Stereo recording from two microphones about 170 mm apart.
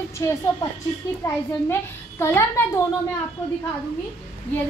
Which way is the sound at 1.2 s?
15° left (ahead or behind).